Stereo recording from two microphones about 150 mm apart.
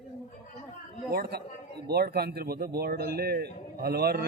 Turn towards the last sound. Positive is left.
turn(degrees=-90)